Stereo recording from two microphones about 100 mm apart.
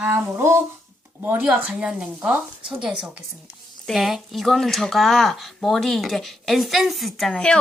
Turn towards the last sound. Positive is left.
turn(degrees=5)  # may be behind; listen again after turning